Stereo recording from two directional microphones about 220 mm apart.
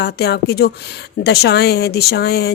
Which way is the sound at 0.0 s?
45° left (ahead or behind).